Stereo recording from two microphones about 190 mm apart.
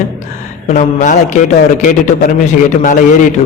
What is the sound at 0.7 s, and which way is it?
Speech, 40° left (ahead or behind).